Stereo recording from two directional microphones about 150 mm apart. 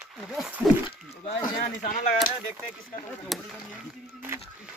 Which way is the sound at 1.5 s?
60° left (ahead or behind).